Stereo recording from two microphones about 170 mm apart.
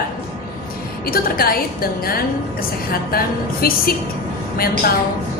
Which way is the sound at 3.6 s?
60° left (ahead or behind).